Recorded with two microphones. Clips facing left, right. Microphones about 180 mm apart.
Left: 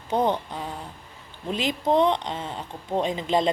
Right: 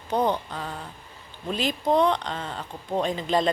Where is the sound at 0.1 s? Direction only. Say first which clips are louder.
Left 1 dB; 20° left (ahead or behind).